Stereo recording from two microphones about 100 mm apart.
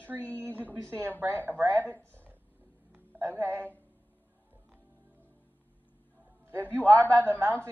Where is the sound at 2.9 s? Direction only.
20° right (ahead or behind).